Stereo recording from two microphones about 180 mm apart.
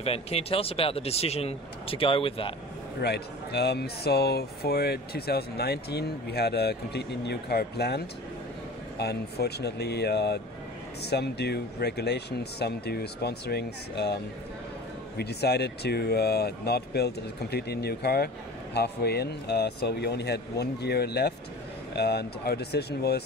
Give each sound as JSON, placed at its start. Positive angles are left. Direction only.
{"t": 0.0, "sound": "speech", "side_deg": 35}
{"t": 3.0, "sound": "speech", "side_deg": 65}
{"t": 15.1, "sound": "speech", "side_deg": 65}